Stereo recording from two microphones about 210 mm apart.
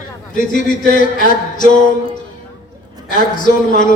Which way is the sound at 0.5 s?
40° left (ahead or behind).